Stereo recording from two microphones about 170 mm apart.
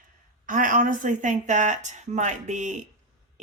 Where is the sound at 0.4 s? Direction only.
50° right (ahead or behind).